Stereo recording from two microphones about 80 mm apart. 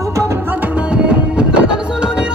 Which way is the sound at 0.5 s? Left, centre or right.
Centre.